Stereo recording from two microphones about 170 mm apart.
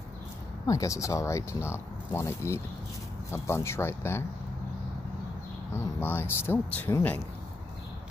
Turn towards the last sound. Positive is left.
turn(degrees=15)  # may be behind; listen again after turning